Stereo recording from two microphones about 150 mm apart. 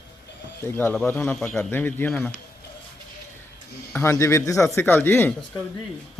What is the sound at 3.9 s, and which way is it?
Speech, 15° left (ahead or behind).